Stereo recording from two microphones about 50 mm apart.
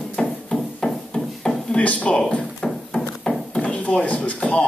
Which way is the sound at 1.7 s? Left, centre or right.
Left.